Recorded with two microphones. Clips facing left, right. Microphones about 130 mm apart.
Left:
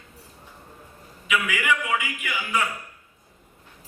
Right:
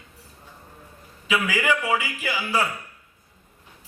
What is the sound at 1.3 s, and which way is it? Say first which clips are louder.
A man's voice: right 2 dB; 35° right (ahead or behind).